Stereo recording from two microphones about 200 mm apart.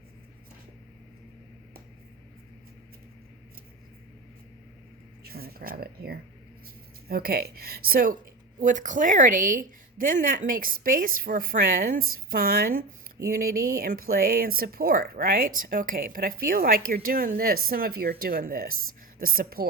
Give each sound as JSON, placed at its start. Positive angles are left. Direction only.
{"t": 5.2, "sound": "speech", "side_deg": -50}